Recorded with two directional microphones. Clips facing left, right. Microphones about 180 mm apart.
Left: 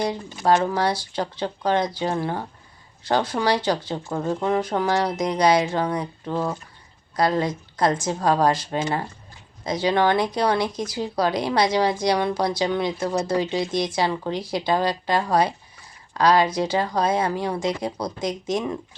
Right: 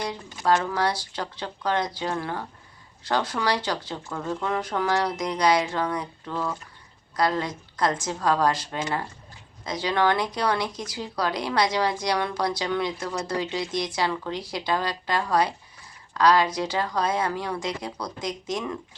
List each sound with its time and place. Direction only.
0.0 s speech: 25° left (ahead or behind)